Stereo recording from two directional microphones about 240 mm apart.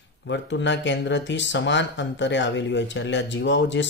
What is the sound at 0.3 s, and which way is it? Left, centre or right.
Speech, left.